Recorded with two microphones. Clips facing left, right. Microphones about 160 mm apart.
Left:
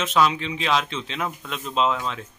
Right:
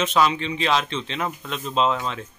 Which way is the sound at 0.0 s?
Centre (ahead or behind).